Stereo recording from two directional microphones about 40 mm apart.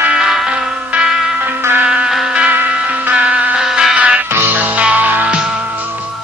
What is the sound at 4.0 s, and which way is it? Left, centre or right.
Music, right.